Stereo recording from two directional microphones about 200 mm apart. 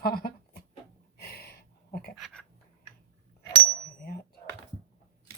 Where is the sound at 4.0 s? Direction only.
50° left (ahead or behind).